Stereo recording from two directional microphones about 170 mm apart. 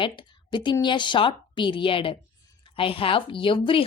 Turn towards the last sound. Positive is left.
turn(degrees=30)  # may be behind; listen again after turning